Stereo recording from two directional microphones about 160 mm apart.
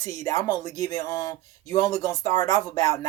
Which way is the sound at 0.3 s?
25° left (ahead or behind).